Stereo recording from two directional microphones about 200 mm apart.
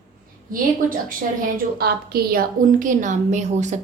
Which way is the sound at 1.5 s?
50° right (ahead or behind).